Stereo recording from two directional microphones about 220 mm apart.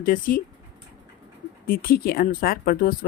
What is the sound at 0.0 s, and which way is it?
Speech, 40° left (ahead or behind).